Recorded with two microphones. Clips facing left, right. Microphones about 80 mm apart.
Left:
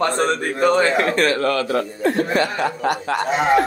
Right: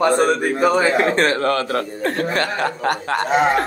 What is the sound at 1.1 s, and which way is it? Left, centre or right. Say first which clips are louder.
Speech: right 1 dB; right.